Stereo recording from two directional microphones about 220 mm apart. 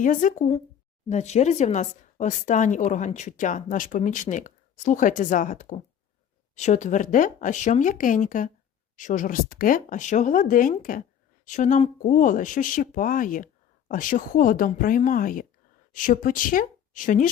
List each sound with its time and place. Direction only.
0.0 s speech: 35° left (ahead or behind)